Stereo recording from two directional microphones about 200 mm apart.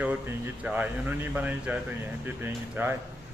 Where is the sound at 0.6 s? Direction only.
10° right (ahead or behind).